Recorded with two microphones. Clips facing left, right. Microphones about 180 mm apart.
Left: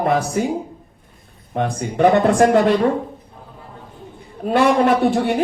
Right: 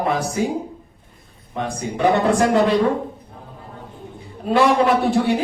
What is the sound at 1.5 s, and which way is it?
Speech, 60° left (ahead or behind).